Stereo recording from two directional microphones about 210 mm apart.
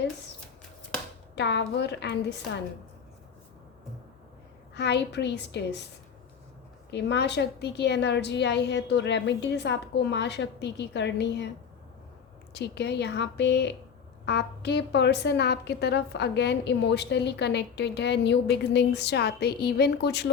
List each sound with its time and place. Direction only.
1.4 s a woman's voice: 55° left (ahead or behind)
4.7 s a woman's voice: 55° left (ahead or behind)
6.9 s a woman's voice: 55° left (ahead or behind)
12.5 s a woman's voice: 55° left (ahead or behind)